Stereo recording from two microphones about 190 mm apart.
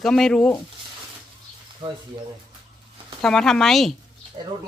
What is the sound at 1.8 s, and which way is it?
Speech, 25° right (ahead or behind).